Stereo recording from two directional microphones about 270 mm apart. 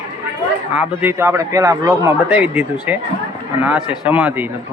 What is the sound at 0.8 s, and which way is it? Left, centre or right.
A man's voice, centre.